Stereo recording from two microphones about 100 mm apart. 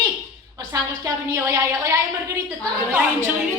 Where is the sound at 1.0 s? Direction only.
30° right (ahead or behind).